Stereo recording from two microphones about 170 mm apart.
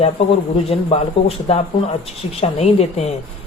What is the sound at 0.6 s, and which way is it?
Speech, 35° left (ahead or behind).